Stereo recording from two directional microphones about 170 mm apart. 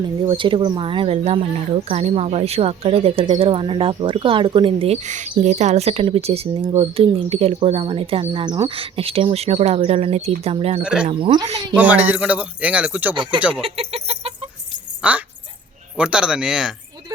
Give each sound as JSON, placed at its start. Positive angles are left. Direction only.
{"t": 0.0, "sound": "speech", "side_deg": -30}
{"t": 10.8, "sound": "speech", "side_deg": -5}
{"t": 11.1, "sound": "speech", "side_deg": -30}
{"t": 11.8, "sound": "speech", "side_deg": -10}
{"t": 13.6, "sound": "chicken", "side_deg": -35}
{"t": 15.0, "sound": "speech", "side_deg": -5}